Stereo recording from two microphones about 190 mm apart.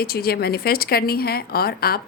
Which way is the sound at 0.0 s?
55° left (ahead or behind).